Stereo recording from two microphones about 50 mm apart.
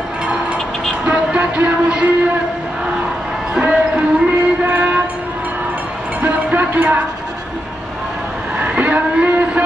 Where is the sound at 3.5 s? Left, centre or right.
Centre.